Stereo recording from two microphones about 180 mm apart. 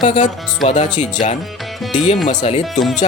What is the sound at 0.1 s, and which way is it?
Speech, 40° left (ahead or behind).